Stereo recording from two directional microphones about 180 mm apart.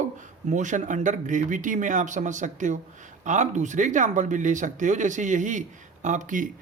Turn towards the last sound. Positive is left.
turn(degrees=-45)  # may be behind; listen again after turning